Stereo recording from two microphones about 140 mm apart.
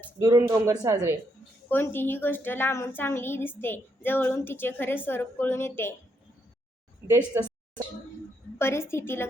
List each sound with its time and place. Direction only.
0.2 s speech: 30° right (ahead or behind)
1.7 s a woman's voice: 15° left (ahead or behind)
7.3 s speech: 20° right (ahead or behind)
8.5 s a woman's voice: 20° left (ahead or behind)